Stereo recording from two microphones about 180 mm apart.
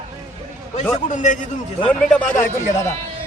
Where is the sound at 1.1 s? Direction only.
45° left (ahead or behind).